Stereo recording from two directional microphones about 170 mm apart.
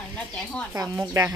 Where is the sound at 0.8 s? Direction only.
20° right (ahead or behind).